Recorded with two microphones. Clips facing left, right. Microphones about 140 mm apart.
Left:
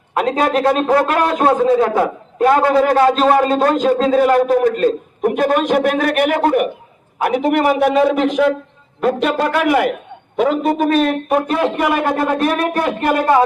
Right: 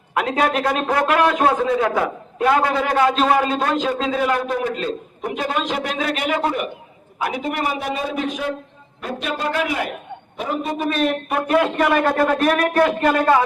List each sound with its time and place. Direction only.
0.1 s a man's voice: 35° left (ahead or behind); by 11.0 s 55° left (ahead or behind)
11.6 s speech: 15° left (ahead or behind)